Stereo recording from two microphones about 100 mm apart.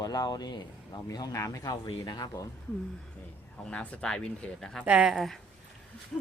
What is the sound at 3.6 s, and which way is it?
Speech, 10° left (ahead or behind).